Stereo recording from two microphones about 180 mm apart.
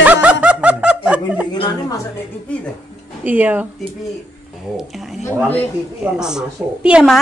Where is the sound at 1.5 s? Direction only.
20° left (ahead or behind).